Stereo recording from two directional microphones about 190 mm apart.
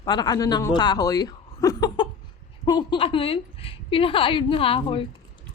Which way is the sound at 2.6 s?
25° left (ahead or behind).